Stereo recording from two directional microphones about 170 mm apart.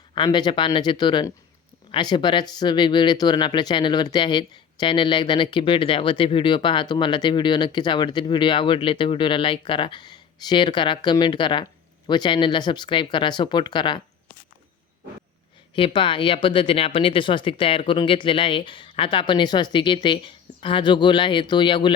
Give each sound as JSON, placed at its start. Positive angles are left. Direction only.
{"t": 0.1, "sound": "speech", "side_deg": 25}
{"t": 15.7, "sound": "speech", "side_deg": 30}